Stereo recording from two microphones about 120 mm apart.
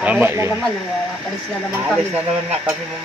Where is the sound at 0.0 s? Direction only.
10° right (ahead or behind).